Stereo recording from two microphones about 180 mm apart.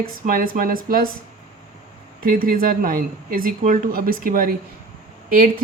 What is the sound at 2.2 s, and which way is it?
A woman's voice, 50° right (ahead or behind).